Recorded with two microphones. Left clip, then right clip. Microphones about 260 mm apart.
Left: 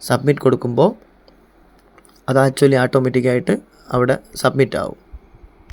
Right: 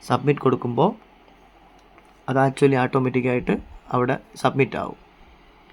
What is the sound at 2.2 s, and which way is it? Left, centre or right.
Speech, centre.